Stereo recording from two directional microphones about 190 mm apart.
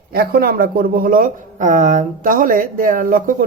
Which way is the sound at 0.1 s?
55° right (ahead or behind).